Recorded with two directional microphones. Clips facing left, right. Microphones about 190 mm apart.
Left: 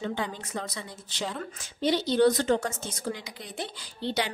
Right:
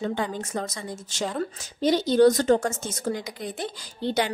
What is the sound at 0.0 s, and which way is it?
Speech, 45° right (ahead or behind).